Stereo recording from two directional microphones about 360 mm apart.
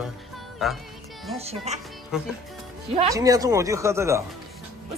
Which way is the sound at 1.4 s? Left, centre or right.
Centre.